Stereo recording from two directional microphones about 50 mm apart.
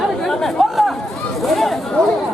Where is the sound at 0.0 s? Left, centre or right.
Centre.